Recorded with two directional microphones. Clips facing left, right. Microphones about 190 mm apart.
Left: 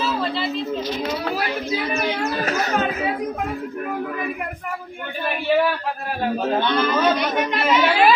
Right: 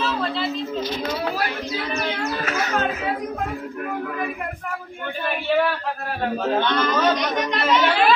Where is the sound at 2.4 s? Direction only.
40° left (ahead or behind).